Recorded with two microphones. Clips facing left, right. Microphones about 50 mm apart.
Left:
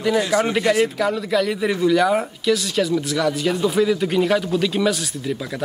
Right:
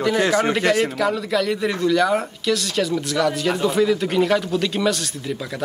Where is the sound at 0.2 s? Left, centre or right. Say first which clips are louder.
Right 1 dB; right.